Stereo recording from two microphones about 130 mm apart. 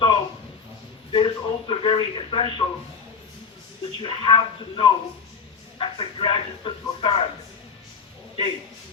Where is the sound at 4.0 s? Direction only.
40° left (ahead or behind).